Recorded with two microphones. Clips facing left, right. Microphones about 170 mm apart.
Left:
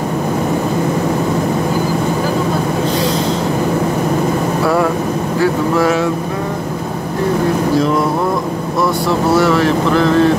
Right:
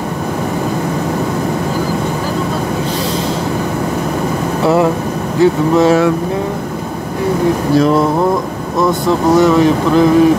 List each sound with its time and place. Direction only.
5.4 s speech: 20° right (ahead or behind)
8.8 s speech: 15° right (ahead or behind)